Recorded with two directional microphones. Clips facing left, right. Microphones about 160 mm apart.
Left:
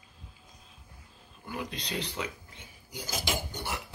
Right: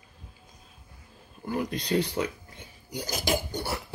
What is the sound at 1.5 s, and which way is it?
Speech, 45° right (ahead or behind).